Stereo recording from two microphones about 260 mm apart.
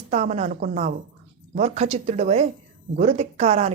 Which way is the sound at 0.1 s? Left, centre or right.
Right.